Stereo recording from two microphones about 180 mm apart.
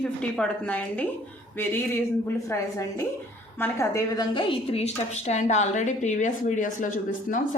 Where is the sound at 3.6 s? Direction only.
15° left (ahead or behind).